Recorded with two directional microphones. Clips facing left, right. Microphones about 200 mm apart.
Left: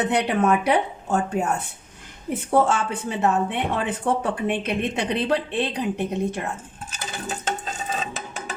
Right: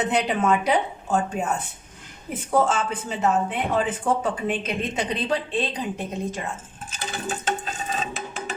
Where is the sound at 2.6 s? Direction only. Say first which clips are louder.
Left 1 dB; 60° left (ahead or behind).